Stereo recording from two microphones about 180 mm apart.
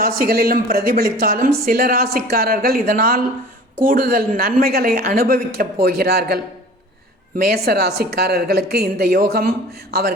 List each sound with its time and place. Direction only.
0.0 s a woman's voice: 55° right (ahead or behind)